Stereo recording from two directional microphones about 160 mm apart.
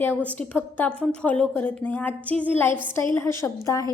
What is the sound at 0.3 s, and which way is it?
A woman's voice, 10° left (ahead or behind).